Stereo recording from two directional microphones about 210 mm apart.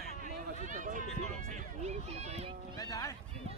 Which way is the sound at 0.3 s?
40° right (ahead or behind).